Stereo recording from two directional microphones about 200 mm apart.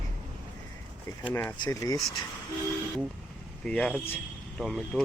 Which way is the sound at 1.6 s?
20° left (ahead or behind).